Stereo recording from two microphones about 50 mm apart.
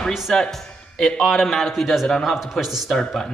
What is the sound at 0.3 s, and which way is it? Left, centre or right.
A man's voice, centre.